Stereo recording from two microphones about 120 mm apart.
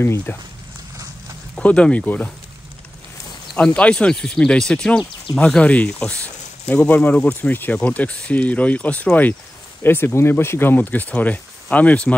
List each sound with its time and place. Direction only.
0.0 s speech: 20° left (ahead or behind)
1.5 s speech: 10° left (ahead or behind)
3.5 s speech: 10° left (ahead or behind)